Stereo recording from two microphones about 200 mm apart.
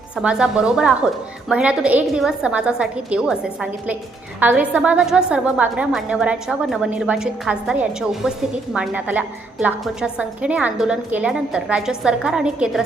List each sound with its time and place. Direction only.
0.2 s a woman's voice: 5° right (ahead or behind)